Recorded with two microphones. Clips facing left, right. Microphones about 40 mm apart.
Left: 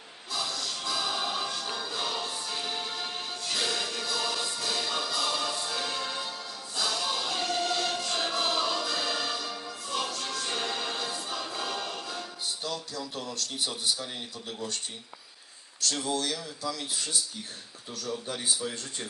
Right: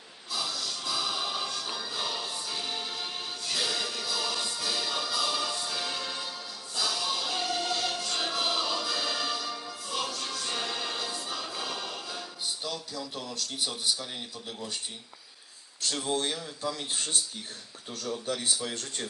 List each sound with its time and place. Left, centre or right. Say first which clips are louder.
0.3 s music: left 1 dB; centre
13.3 s speech: right 1 dB; centre
16.0 s speech: even; right
18.4 s speech: even; right